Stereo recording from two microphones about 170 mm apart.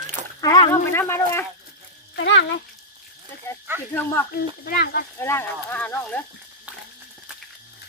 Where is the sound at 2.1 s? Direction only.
90° left.